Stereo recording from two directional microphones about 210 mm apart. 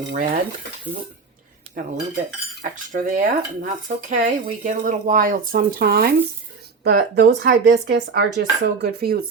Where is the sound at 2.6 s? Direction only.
40° right (ahead or behind).